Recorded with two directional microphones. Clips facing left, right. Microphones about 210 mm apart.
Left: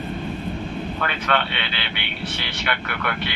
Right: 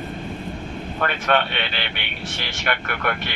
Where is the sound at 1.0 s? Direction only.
45° right (ahead or behind).